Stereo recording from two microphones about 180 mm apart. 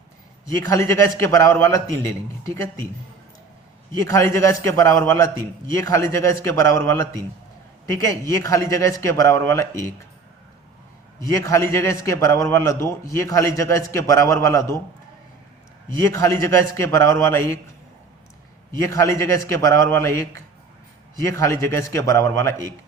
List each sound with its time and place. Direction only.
0.6 s a man's voice: 15° left (ahead or behind)
4.0 s a man's voice: 15° left (ahead or behind)
11.2 s a man's voice: 20° left (ahead or behind)
16.0 s a man's voice: 15° left (ahead or behind)
18.8 s a man's voice: 15° left (ahead or behind)